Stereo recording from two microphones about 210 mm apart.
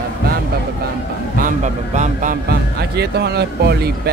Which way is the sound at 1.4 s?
35° right (ahead or behind).